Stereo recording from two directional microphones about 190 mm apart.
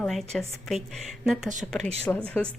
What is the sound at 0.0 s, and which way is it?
A woman's voice, centre (ahead or behind).